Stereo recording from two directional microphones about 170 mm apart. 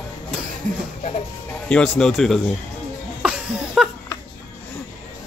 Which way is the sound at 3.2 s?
5° right (ahead or behind).